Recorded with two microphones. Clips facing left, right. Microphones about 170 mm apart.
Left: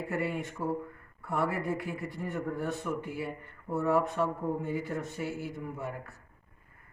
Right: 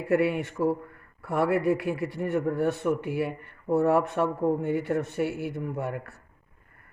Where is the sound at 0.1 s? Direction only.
75° right (ahead or behind).